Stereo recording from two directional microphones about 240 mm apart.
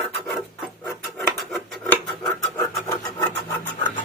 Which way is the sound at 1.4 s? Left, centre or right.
Centre.